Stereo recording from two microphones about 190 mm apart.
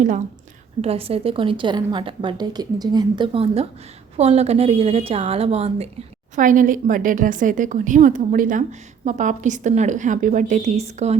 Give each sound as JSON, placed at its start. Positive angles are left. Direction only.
{"t": 0.8, "sound": "a woman's voice", "side_deg": -30}
{"t": 6.3, "sound": "a woman's voice", "side_deg": -45}